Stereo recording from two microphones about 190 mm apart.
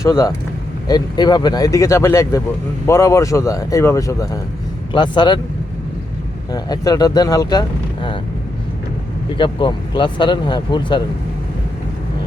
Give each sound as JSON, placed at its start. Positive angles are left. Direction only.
{"t": 0.0, "sound": "speech", "side_deg": 15}
{"t": 6.5, "sound": "speech", "side_deg": 20}
{"t": 9.4, "sound": "speech", "side_deg": 25}